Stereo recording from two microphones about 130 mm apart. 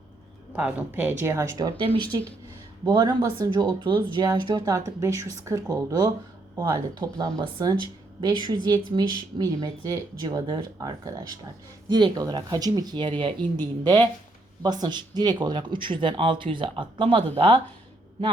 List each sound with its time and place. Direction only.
0.5 s a woman's voice: 10° right (ahead or behind); by 17.6 s 45° right (ahead or behind)